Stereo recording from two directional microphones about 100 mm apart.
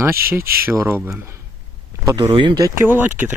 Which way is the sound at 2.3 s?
55° right (ahead or behind).